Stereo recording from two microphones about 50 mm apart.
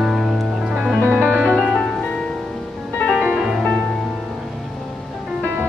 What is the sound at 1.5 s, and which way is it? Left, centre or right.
Music, centre.